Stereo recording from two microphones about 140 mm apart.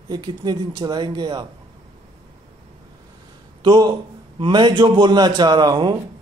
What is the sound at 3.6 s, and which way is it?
A man's voice, 30° right (ahead or behind).